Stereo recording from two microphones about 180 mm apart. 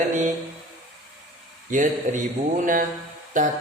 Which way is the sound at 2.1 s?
45° right (ahead or behind).